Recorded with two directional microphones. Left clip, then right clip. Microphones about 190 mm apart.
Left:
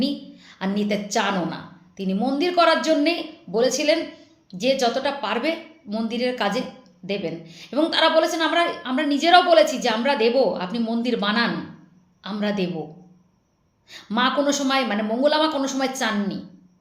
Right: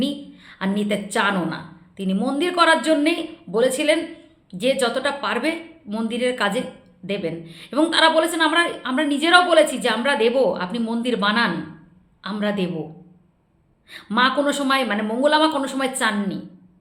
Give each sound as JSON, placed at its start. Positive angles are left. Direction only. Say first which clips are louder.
{"t": 0.0, "sound": "a sound", "louder": "even", "side_deg": -15}
{"t": 1.1, "sound": "a woman's voice", "louder": "right 3 dB", "side_deg": -15}
{"t": 13.9, "sound": "a woman's voice", "louder": "right 3 dB", "side_deg": -15}